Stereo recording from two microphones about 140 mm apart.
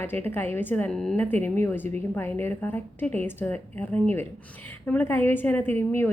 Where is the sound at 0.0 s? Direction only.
15° left (ahead or behind).